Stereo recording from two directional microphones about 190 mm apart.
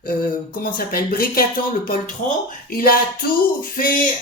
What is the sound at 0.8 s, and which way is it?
Speech, 50° left (ahead or behind).